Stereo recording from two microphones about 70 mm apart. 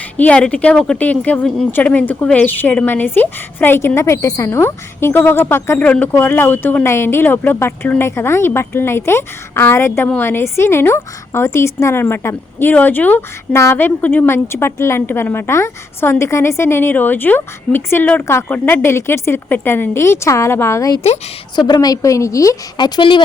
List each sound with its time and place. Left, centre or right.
0.2 s a woman's voice: centre; by 5.8 s left
5.8 s a woman's voice: left
6.8 s a woman's voice: left
13.5 s a woman's voice: left
14.3 s a woman's voice: left
18.0 s a woman's voice: left
18.3 s a woman's voice: left
18.5 s a woman's voice: left
21.7 s a woman's voice: left